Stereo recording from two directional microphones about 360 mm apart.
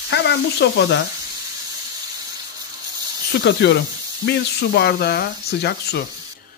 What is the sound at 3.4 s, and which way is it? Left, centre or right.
Speech, left.